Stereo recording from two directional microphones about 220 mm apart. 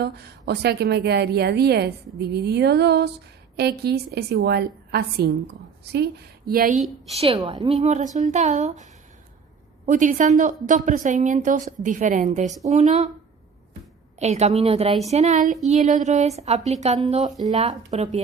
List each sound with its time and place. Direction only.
0.0 s a woman's voice: 50° right (ahead or behind)
7.1 s a woman's voice: 25° right (ahead or behind)
14.2 s a woman's voice: 30° right (ahead or behind)